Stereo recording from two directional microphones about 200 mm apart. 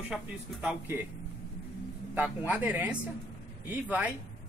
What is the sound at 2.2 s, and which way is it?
Speech, 10° right (ahead or behind).